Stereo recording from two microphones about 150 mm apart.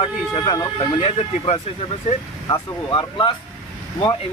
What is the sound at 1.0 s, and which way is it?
Speech, 40° left (ahead or behind).